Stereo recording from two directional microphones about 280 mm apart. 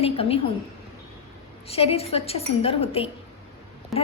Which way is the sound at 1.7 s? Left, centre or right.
Left.